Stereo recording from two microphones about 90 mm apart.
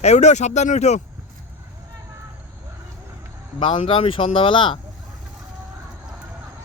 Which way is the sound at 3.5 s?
75° left (ahead or behind).